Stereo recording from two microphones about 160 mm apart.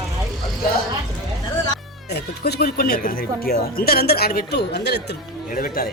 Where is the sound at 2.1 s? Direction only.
90° left.